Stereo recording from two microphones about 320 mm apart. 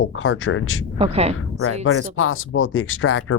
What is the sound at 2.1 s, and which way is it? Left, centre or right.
Speech, left.